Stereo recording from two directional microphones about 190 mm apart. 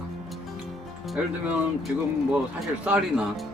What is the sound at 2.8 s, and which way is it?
Speech, 5° right (ahead or behind).